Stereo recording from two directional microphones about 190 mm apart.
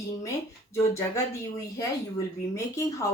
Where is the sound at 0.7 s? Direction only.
15° left (ahead or behind).